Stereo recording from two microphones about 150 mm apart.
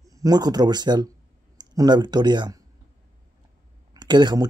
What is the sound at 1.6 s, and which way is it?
Speech, 30° right (ahead or behind).